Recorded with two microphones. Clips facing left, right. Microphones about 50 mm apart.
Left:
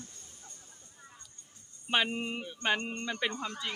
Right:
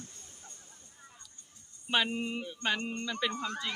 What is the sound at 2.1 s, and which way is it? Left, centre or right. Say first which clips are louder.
A woman's voice: right 1 dB; centre.